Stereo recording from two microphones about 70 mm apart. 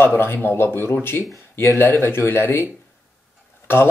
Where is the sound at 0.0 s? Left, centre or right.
Left.